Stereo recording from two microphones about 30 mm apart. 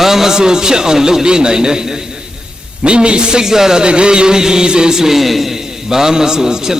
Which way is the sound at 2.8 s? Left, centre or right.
Right.